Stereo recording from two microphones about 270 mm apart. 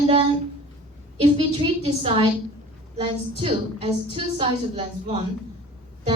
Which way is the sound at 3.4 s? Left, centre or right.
Centre.